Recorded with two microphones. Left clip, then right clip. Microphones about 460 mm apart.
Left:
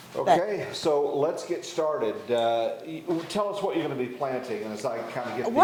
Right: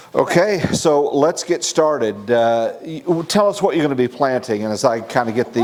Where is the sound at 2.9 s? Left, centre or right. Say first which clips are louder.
Right 11 dB; right.